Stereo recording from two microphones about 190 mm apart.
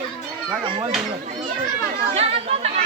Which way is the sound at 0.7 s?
25° right (ahead or behind).